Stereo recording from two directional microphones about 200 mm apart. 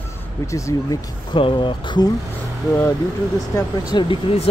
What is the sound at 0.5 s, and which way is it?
Speech, 15° left (ahead or behind).